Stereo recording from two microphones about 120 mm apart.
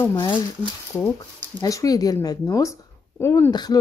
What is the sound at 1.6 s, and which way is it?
Speech, 30° left (ahead or behind).